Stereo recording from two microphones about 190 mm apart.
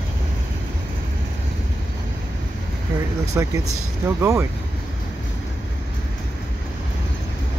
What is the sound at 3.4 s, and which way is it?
Speech, 15° right (ahead or behind).